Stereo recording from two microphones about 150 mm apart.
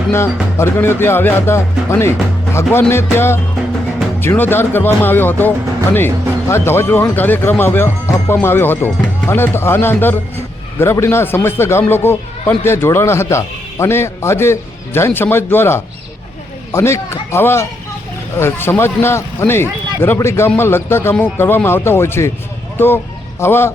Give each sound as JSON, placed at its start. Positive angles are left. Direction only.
{"t": 0.1, "sound": "a man's voice", "side_deg": 15}